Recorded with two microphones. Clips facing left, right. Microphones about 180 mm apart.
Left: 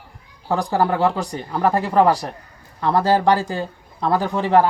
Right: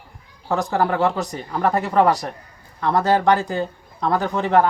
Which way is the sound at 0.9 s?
Centre (ahead or behind).